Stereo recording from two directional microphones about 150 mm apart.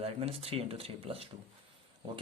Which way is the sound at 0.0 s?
40° right (ahead or behind).